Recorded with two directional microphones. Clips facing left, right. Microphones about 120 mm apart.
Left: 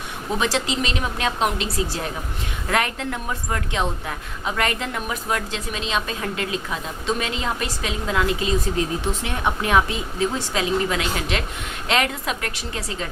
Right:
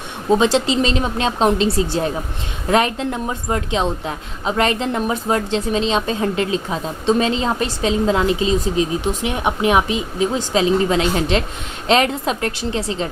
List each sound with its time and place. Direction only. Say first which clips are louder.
0.3 s a woman's voice: right 8 dB; 25° right (ahead or behind)